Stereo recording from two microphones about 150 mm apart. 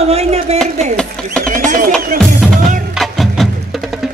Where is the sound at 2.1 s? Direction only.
80° right.